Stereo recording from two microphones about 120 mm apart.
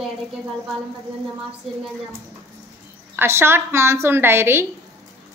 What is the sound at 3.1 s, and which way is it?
A woman's voice, 20° right (ahead or behind).